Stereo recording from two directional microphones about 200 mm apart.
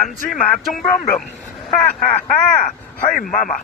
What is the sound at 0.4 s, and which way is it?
Speech, 5° left (ahead or behind).